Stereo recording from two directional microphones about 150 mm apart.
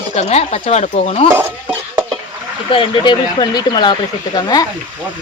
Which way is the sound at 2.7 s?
35° left (ahead or behind).